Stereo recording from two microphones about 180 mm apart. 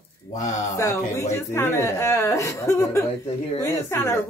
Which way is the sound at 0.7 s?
20° left (ahead or behind).